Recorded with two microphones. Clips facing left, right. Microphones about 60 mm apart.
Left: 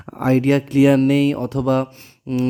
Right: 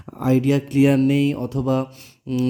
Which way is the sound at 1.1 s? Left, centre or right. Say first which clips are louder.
Left 3 dB; left.